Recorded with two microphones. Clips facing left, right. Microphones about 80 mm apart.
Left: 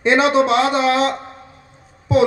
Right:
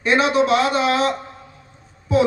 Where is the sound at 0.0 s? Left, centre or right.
Left.